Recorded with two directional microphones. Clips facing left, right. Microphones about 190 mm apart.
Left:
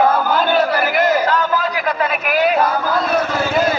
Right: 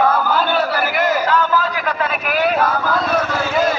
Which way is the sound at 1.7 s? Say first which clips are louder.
Left 2 dB; 10° left (ahead or behind).